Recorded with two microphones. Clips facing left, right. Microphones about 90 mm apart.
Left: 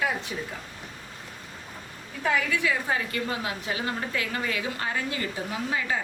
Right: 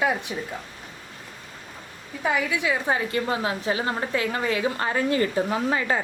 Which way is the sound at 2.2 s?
15° right (ahead or behind).